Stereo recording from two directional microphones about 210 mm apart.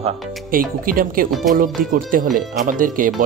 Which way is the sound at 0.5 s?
40° right (ahead or behind).